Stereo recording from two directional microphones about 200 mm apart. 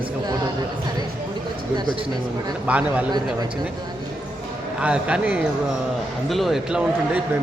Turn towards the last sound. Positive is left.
turn(degrees=-5)  # may be behind; listen again after turning